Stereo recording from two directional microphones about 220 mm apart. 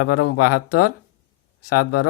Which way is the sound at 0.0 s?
90° left.